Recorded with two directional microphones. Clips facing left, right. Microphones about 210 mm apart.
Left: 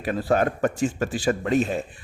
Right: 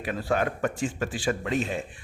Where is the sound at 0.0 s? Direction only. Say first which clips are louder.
Left 5 dB; 40° left (ahead or behind).